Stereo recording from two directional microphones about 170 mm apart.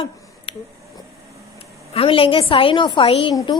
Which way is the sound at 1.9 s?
35° left (ahead or behind).